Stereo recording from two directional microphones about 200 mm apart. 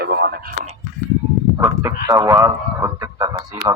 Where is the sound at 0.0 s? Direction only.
50° right (ahead or behind).